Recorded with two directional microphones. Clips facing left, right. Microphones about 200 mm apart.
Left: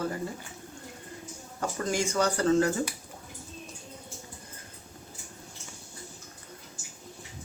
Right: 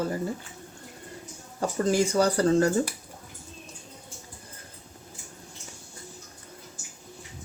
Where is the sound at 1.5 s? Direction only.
30° right (ahead or behind).